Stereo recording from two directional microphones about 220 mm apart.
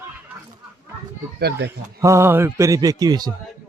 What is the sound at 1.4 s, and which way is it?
Speech, 50° right (ahead or behind).